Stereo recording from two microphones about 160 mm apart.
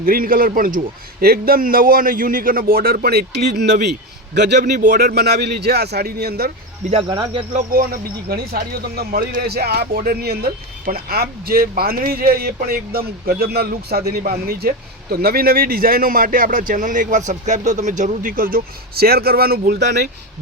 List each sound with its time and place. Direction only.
0.0 s speech: 65° right (ahead or behind)
7.7 s speech: 65° right (ahead or behind); by 20.1 s 90° right